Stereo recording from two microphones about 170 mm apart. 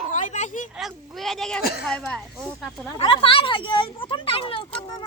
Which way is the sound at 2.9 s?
30° left (ahead or behind).